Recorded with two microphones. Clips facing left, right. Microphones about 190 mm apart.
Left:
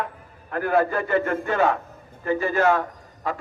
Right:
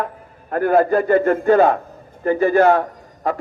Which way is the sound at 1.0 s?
35° right (ahead or behind).